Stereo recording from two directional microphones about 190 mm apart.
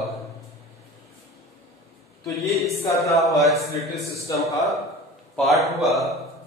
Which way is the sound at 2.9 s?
15° left (ahead or behind).